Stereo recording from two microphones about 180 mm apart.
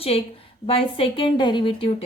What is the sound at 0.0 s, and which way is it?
A woman's voice, 30° left (ahead or behind).